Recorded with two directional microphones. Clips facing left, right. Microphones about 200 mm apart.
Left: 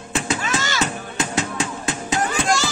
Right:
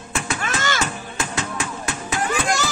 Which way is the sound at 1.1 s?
20° left (ahead or behind).